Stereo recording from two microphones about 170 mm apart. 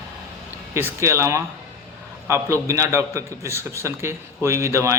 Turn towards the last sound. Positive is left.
turn(degrees=-15)  # may be behind; listen again after turning